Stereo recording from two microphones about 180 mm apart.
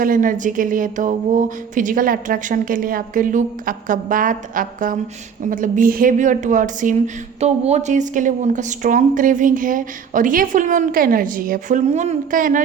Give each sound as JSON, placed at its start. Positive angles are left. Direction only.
{"t": 0.0, "sound": "speech", "side_deg": -50}